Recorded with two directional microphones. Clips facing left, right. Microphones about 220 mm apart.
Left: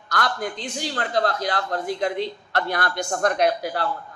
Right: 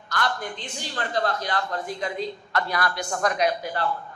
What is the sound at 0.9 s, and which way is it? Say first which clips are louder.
A woman's voice: left 2 dB; 85° left.